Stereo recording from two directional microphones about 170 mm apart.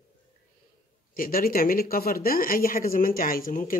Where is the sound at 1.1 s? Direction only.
55° left (ahead or behind).